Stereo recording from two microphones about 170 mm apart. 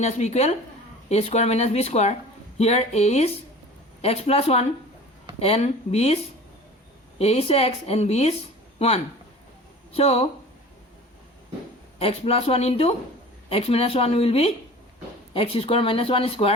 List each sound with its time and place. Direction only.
0.0 s a woman's voice: 40° left (ahead or behind)
7.2 s a woman's voice: 35° left (ahead or behind)
9.9 s a woman's voice: 35° left (ahead or behind)
11.9 s a woman's voice: 35° left (ahead or behind)